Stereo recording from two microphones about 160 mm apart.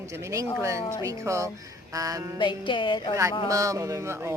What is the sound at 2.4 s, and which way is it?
Speech, 30° left (ahead or behind).